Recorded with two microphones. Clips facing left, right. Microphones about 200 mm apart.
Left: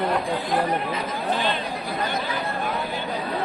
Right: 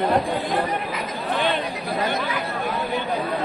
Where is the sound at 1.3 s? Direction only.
60° right (ahead or behind).